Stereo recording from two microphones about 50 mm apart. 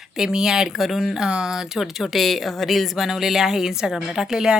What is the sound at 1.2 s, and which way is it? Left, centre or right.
Speech, centre.